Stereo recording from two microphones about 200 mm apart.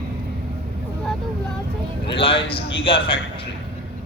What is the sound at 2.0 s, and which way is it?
A man's voice, 25° left (ahead or behind).